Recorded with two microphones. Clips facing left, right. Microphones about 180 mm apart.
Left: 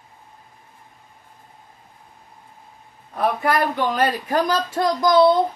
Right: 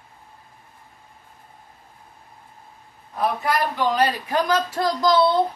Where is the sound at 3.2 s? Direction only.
55° left (ahead or behind).